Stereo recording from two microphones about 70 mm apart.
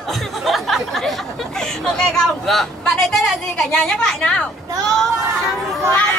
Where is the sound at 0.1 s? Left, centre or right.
Centre.